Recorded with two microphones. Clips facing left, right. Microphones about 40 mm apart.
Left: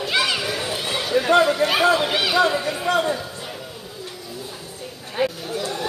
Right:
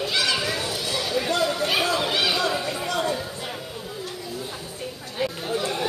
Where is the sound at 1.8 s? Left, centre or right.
Left.